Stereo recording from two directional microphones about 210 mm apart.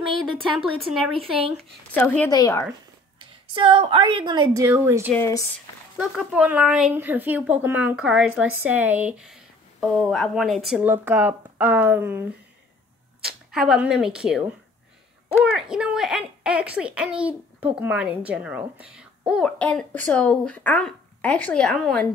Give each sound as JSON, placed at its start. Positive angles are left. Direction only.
{"t": 0.6, "sound": "a woman's voice", "side_deg": 0}
{"t": 3.2, "sound": "a woman's voice", "side_deg": -25}
{"t": 5.1, "sound": "a woman's voice", "side_deg": 10}
{"t": 5.9, "sound": "speech", "side_deg": -5}
{"t": 15.5, "sound": "speech", "side_deg": -5}